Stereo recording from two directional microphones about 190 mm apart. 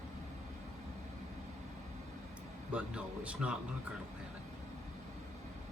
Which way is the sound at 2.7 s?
5° right (ahead or behind).